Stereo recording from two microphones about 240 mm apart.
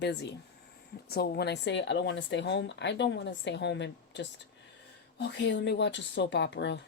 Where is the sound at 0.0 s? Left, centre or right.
Left.